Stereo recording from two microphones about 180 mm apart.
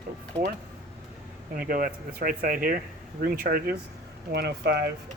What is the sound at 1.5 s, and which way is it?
Speech, 50° right (ahead or behind).